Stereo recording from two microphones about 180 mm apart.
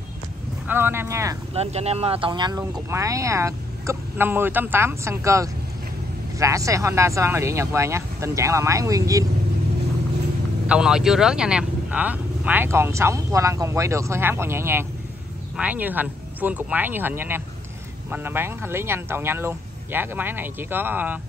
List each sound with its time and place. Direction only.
0.7 s speech: 10° right (ahead or behind)
1.5 s speech: 35° right (ahead or behind); by 9.3 s 20° right (ahead or behind)
10.7 s speech: 5° right (ahead or behind)